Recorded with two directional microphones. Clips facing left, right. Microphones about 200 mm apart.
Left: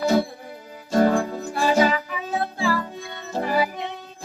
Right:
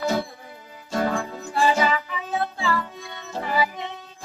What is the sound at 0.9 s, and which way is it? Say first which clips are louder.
Music: left 6 dB; 40° left (ahead or behind).